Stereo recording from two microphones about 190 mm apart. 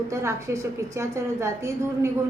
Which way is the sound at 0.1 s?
15° right (ahead or behind).